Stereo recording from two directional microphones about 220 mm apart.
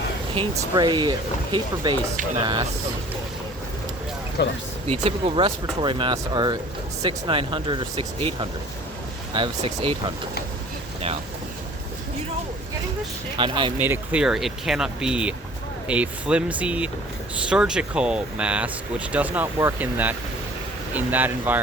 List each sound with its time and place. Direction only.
0.3 s speech: 20° right (ahead or behind)
4.4 s speech: 50° left (ahead or behind)
4.9 s speech: 25° right (ahead or behind)
13.3 s speech: 20° right (ahead or behind)
13.7 s speech: 10° right (ahead or behind)